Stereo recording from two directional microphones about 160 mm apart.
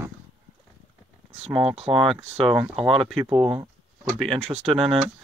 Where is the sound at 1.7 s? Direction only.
35° right (ahead or behind).